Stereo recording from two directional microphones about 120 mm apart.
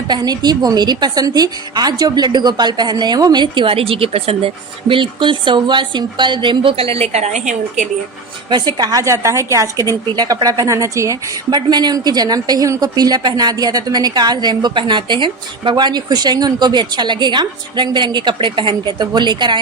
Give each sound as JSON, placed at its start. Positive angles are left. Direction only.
{"t": 0.1, "sound": "a woman's voice", "side_deg": -35}
{"t": 8.4, "sound": "a woman's voice", "side_deg": -35}